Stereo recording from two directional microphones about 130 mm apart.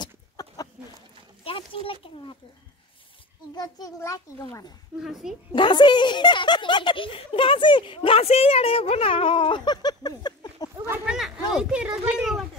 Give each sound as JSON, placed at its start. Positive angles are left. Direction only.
{"t": 0.0, "sound": "chicken", "side_deg": 30}
{"t": 1.4, "sound": "speech", "side_deg": 45}
{"t": 3.5, "sound": "a child's voice", "side_deg": 30}
{"t": 4.9, "sound": "speech", "side_deg": -5}
{"t": 5.5, "sound": "speech", "side_deg": 35}
{"t": 11.1, "sound": "a sound", "side_deg": -5}
{"t": 11.5, "sound": "speech", "side_deg": -5}